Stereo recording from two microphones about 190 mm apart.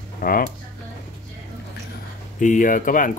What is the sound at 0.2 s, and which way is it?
Speech, 50° left (ahead or behind).